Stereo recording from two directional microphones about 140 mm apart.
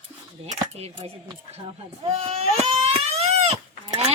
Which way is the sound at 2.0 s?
45° right (ahead or behind).